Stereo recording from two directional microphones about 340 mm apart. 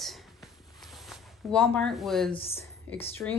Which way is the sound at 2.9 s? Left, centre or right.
Centre.